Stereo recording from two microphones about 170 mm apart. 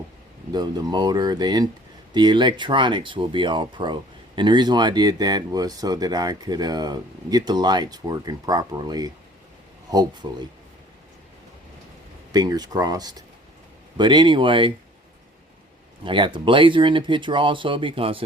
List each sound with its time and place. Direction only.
0.5 s speech: 25° right (ahead or behind)
10.2 s speech: 25° right (ahead or behind)
12.3 s speech: 25° right (ahead or behind)
16.0 s speech: 30° right (ahead or behind)